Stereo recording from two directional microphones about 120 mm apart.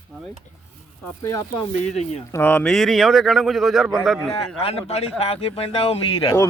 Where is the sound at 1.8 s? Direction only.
65° left (ahead or behind).